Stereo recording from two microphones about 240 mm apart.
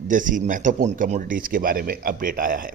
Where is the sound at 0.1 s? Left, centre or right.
Right.